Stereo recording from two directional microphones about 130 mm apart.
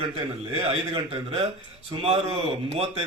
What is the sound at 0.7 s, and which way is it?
A man's voice, 50° right (ahead or behind).